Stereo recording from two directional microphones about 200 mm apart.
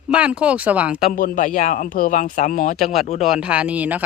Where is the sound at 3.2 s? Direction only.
5° right (ahead or behind).